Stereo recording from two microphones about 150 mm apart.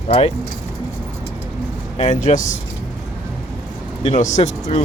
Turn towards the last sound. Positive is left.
turn(degrees=50)  # may be behind; listen again after turning